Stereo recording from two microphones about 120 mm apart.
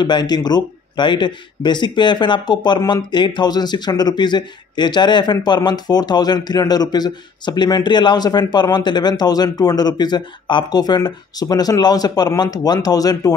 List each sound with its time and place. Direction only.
0.0 s speech: 40° left (ahead or behind)